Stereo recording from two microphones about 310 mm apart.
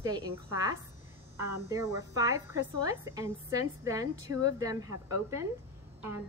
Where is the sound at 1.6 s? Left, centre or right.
Centre.